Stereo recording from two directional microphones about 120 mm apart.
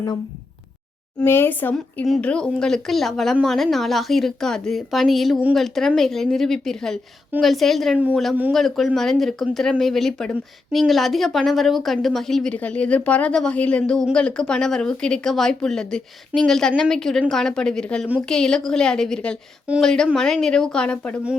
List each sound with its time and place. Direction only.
1.2 s speech: 20° left (ahead or behind)